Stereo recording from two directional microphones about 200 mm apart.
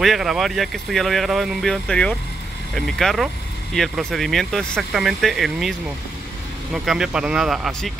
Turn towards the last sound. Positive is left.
turn(degrees=0)  # may be behind; listen again after turning